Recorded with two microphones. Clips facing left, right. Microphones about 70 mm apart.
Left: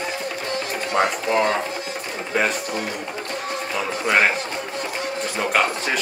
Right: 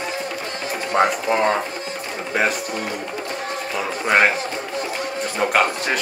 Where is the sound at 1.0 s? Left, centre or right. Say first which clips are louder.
Right 2 dB; right.